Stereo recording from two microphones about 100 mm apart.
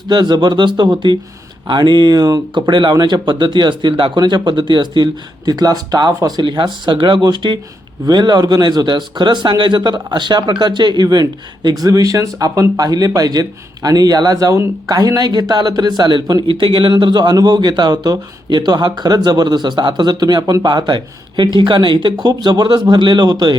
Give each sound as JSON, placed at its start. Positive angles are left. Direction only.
{"t": 0.1, "sound": "a man's voice", "side_deg": -45}
{"t": 6.4, "sound": "a man's voice", "side_deg": -50}
{"t": 14.5, "sound": "speech", "side_deg": -25}
{"t": 14.9, "sound": "a man's voice", "side_deg": -40}
{"t": 16.5, "sound": "speech", "side_deg": -60}
{"t": 16.9, "sound": "a man's voice", "side_deg": -45}